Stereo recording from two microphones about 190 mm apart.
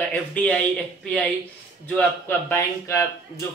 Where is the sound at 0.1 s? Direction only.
5° left (ahead or behind).